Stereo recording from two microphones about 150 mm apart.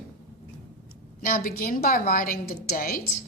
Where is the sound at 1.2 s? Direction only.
70° left (ahead or behind).